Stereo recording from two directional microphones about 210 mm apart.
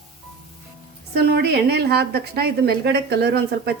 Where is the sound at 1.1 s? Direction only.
50° right (ahead or behind).